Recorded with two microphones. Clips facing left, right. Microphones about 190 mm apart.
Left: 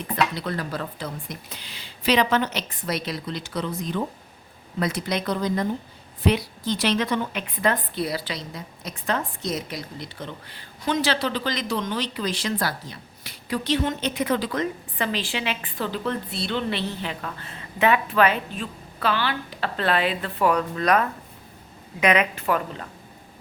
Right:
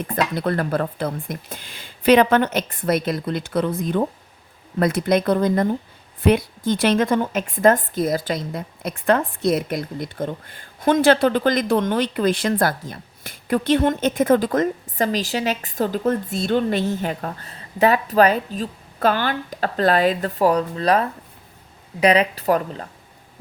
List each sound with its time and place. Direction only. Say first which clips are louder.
0.3 s a woman's voice: right 8 dB; 55° right (ahead or behind); by 22.9 s 40° right (ahead or behind)